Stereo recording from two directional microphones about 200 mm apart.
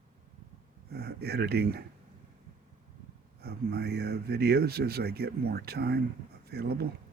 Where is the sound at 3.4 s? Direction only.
50° right (ahead or behind).